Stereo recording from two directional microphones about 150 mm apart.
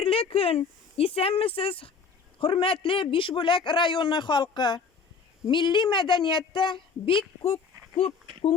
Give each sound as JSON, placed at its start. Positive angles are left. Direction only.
{"t": 0.0, "sound": "a woman's voice", "side_deg": 40}